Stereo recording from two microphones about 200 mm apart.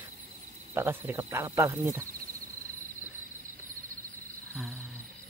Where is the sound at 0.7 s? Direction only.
10° right (ahead or behind).